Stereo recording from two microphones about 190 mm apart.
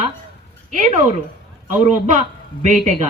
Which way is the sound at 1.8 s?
40° right (ahead or behind).